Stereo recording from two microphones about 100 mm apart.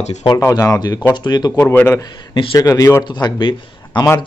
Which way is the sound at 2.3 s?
60° left (ahead or behind).